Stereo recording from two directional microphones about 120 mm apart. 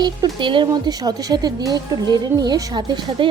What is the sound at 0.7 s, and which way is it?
A woman's voice, 30° right (ahead or behind).